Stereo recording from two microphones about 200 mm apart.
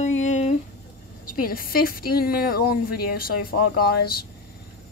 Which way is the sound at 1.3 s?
45° left (ahead or behind).